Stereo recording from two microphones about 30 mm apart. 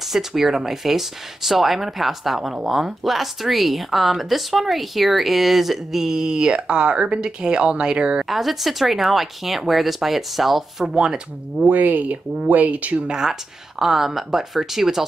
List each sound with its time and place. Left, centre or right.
0.1 s speech: centre
6.1 s speech: right
8.3 s speech: centre
11.6 s speech: right
13.1 s speech: right
13.7 s speech: centre